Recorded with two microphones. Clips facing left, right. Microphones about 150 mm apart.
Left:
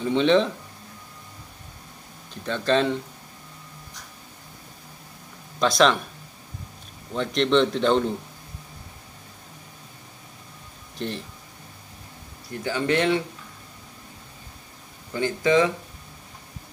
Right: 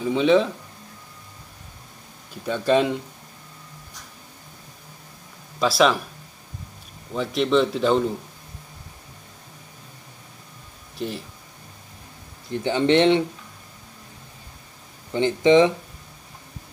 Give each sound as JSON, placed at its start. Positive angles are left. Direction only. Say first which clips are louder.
{"t": 0.0, "sound": "a man's voice", "louder": "right 1 dB", "side_deg": -5}
{"t": 2.4, "sound": "speech", "louder": "right 2 dB", "side_deg": -10}
{"t": 5.6, "sound": "a man's voice", "louder": "right 1 dB", "side_deg": -5}
{"t": 7.2, "sound": "a man's voice", "louder": "even", "side_deg": -5}
{"t": 11.0, "sound": "a man's voice", "louder": "right 1 dB", "side_deg": -5}
{"t": 12.4, "sound": "speech", "louder": "right 5 dB", "side_deg": -25}
{"t": 15.1, "sound": "speech", "louder": "right 5 dB", "side_deg": -20}